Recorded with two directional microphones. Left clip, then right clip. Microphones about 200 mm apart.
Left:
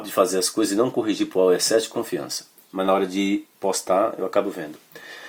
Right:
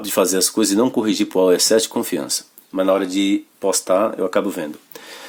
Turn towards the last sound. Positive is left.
turn(degrees=-40)  # may be behind; listen again after turning